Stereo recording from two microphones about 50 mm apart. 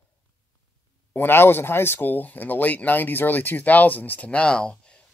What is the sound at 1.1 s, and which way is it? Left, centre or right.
Speech, left.